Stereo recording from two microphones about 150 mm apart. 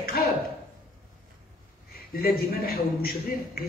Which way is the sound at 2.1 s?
85° left.